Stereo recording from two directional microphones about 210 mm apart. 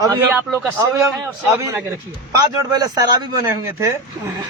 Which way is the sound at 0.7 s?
15° right (ahead or behind).